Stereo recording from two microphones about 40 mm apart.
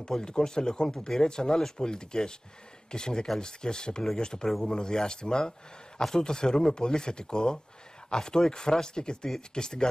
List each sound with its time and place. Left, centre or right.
0.1 s speech: centre